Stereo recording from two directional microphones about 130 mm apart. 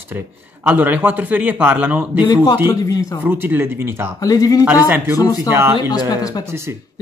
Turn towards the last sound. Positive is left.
turn(degrees=30)  # may be behind; listen again after turning